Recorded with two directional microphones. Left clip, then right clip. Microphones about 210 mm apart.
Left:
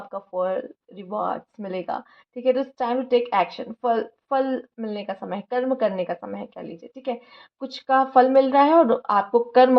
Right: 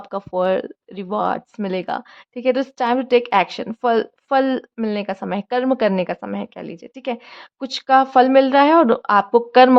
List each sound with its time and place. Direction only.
0.1 s speech: 40° right (ahead or behind)